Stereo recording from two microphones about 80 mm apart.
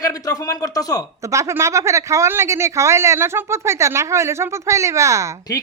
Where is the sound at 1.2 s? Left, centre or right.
Right.